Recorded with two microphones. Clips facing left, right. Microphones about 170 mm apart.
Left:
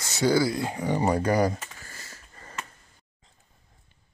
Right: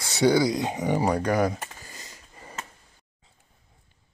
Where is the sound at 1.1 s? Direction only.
5° left (ahead or behind).